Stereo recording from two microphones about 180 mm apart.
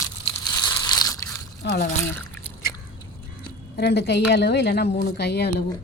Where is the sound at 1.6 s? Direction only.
65° left (ahead or behind).